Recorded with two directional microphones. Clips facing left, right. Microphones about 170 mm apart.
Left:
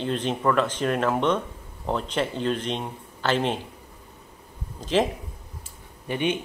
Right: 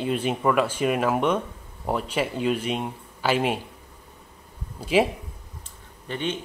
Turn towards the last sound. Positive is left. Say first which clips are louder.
# left 3 dB
turn(degrees=15)  # may be behind; listen again after turning